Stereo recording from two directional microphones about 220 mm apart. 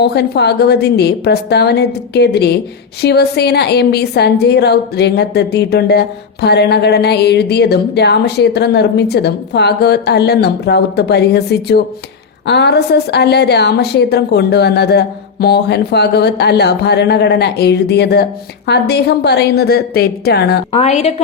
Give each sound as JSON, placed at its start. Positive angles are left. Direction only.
{"t": 0.0, "sound": "a woman's voice", "side_deg": 50}
{"t": 20.7, "sound": "a woman's voice", "side_deg": 30}